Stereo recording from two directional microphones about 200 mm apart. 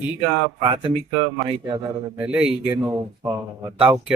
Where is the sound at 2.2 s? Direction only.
5° right (ahead or behind).